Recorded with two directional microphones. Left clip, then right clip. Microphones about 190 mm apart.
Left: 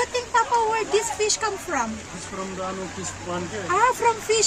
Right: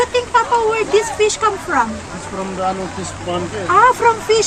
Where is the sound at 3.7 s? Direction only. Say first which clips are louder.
Right 9 dB; 15° left (ahead or behind).